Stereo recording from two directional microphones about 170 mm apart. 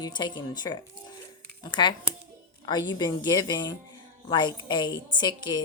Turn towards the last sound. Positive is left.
turn(degrees=25)  # may be behind; listen again after turning